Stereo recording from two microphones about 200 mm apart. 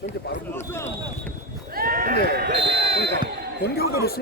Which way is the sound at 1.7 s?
45° right (ahead or behind).